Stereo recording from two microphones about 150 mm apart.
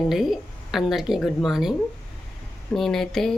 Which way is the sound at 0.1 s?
Centre (ahead or behind).